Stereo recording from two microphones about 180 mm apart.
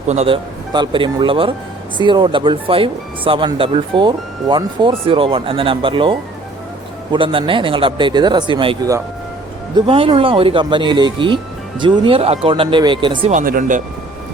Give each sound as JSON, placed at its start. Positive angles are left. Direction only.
{"t": 0.1, "sound": "speech", "side_deg": -40}
{"t": 0.7, "sound": "speech", "side_deg": -25}
{"t": 13.3, "sound": "speech", "side_deg": -50}